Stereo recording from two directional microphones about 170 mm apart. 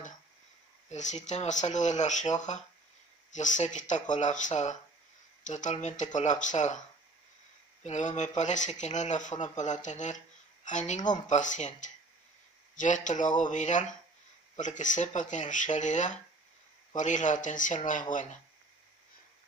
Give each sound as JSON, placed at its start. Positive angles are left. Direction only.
{"t": 0.8, "sound": "speech", "side_deg": 45}
{"t": 7.8, "sound": "speech", "side_deg": 45}